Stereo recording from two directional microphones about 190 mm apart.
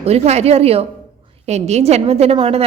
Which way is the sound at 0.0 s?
35° right (ahead or behind).